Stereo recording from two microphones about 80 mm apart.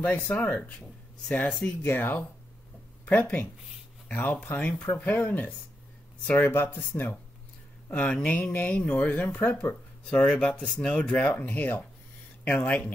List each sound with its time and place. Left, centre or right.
0.3 s speech: centre
7.9 s speech: centre